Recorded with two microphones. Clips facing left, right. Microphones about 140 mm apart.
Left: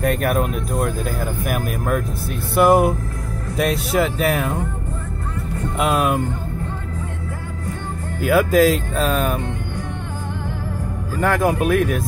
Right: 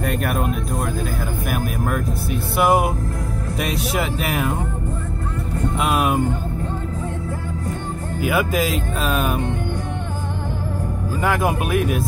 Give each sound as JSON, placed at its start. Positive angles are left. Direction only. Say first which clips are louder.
{"t": 0.0, "sound": "speech", "louder": "left 3 dB", "side_deg": 0}
{"t": 5.8, "sound": "speech", "louder": "left 2 dB", "side_deg": -5}
{"t": 8.2, "sound": "speech", "louder": "left 6 dB", "side_deg": -5}
{"t": 11.1, "sound": "speech", "louder": "left 3 dB", "side_deg": -5}